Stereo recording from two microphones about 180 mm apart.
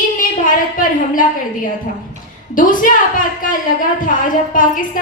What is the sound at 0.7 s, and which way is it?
Speech, 50° left (ahead or behind).